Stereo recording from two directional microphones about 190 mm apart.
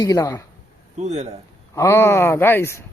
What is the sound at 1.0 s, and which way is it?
Speech, 35° right (ahead or behind).